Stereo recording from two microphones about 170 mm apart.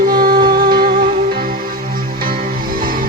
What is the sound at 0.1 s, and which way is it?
Music, 55° right (ahead or behind).